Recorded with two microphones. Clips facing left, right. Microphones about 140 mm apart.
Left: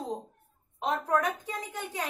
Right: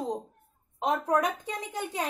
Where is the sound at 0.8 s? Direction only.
20° right (ahead or behind).